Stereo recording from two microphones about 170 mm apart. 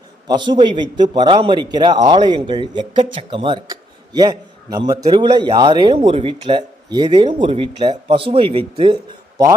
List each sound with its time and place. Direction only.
0.3 s a man's voice: 25° right (ahead or behind)